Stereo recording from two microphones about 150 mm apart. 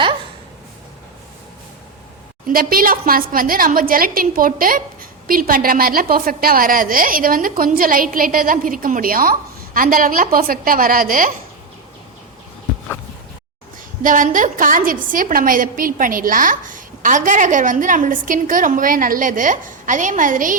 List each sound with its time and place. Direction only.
2.5 s a woman's voice: 75° right (ahead or behind)
14.0 s a woman's voice: 60° right (ahead or behind)